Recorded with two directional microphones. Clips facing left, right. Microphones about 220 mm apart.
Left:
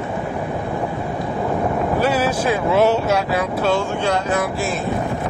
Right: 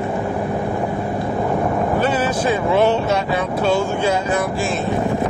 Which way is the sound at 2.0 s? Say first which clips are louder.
Even; 10° left (ahead or behind).